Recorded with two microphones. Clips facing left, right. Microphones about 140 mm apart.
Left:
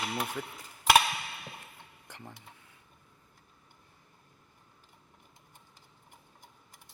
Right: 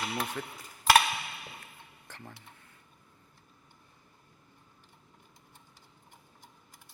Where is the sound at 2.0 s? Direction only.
15° left (ahead or behind).